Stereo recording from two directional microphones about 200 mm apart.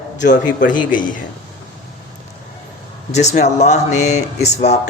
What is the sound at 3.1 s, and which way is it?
Speech, 35° left (ahead or behind).